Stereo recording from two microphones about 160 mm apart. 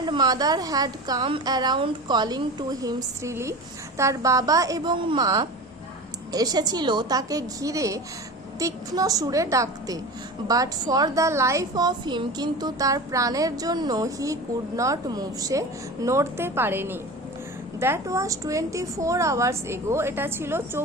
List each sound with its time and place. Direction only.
0.0 s a woman's voice: 25° right (ahead or behind)